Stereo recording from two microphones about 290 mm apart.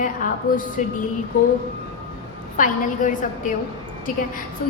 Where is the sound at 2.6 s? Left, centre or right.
Left.